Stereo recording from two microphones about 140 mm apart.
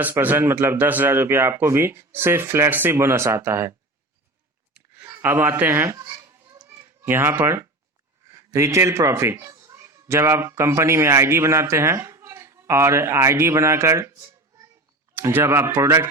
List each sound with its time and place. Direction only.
0.0 s speech: 15° right (ahead or behind)
4.9 s children playing: 20° right (ahead or behind)
8.3 s speech: 20° right (ahead or behind)